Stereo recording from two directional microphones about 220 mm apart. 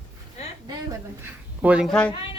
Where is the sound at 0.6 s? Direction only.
10° right (ahead or behind).